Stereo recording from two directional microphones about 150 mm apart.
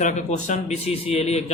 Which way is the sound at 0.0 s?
55° left (ahead or behind).